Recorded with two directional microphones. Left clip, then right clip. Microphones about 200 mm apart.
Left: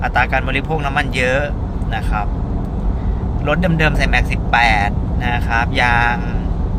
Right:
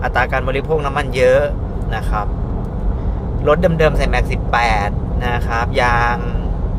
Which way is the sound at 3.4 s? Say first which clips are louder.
Right 4 dB; 15° right (ahead or behind).